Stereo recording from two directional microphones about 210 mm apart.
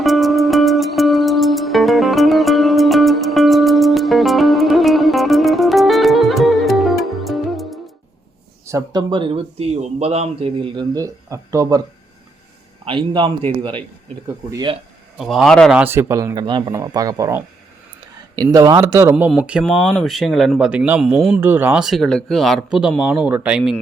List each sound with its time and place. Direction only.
0.0 s music: centre (ahead or behind)
8.6 s speech: 15° right (ahead or behind)
12.8 s speech: 25° right (ahead or behind)
15.2 s speech: centre (ahead or behind)
18.4 s speech: 15° right (ahead or behind)